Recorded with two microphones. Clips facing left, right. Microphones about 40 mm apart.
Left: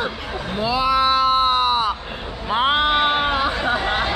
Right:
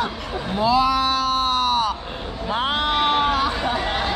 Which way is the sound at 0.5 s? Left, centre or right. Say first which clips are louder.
Right 1 dB; centre.